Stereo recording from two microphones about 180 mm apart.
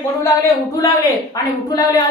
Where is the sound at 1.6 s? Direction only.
20° left (ahead or behind).